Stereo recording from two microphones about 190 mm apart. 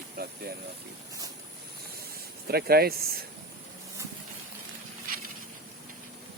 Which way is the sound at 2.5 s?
55° right (ahead or behind).